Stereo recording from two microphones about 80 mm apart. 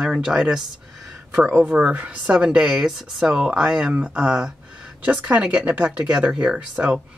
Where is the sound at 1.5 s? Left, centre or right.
Centre.